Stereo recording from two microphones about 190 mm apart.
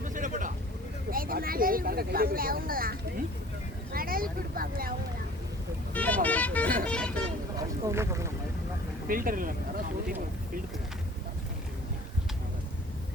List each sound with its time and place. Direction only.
0.0 s vehicle: 45° right (ahead or behind)
1.1 s speech: 50° right (ahead or behind)
3.9 s speech: 50° right (ahead or behind)
5.9 s speech: 10° left (ahead or behind)
7.9 s speech: 15° right (ahead or behind)
9.0 s speech: 45° right (ahead or behind)